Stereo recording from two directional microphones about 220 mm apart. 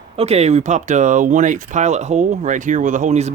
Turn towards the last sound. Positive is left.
turn(degrees=-30)  # may be behind; listen again after turning